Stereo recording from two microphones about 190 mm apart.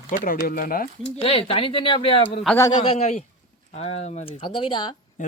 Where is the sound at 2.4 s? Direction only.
10° left (ahead or behind).